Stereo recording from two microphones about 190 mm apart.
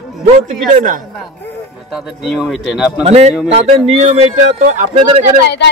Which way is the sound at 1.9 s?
5° right (ahead or behind).